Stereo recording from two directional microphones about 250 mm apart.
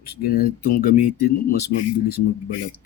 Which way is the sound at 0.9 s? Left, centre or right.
Left.